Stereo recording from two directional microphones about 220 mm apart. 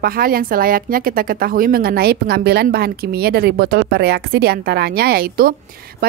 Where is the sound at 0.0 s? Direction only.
40° right (ahead or behind).